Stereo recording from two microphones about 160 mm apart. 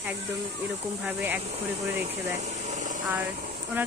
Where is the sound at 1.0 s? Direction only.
10° right (ahead or behind).